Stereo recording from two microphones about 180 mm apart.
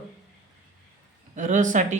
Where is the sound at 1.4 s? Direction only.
45° right (ahead or behind).